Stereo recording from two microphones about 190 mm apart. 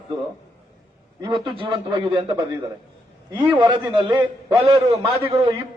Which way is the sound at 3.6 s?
25° right (ahead or behind).